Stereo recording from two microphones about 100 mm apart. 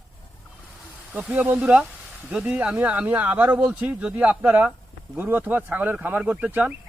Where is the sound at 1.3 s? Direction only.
15° right (ahead or behind).